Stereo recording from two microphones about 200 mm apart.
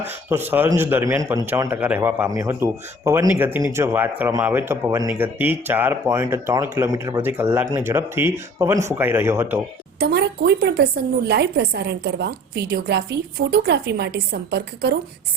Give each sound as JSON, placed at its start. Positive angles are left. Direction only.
{"t": 0.0, "sound": "a man's voice", "side_deg": -10}
{"t": 10.0, "sound": "a woman's voice", "side_deg": -55}